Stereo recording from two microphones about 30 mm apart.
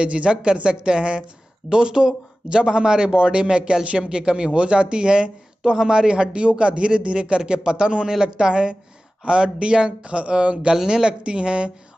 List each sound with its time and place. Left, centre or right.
0.0 s speech: right
10.7 s speech: right
11.2 s speech: right